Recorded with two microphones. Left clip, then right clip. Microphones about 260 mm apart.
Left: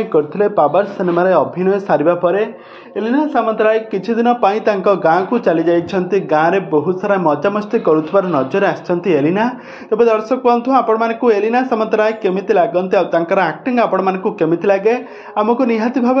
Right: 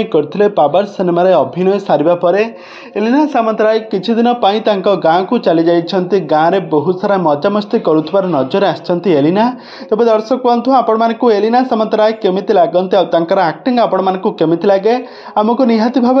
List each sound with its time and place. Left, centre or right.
0.1 s a man's voice: right
3.1 s speech: right
3.9 s speech: right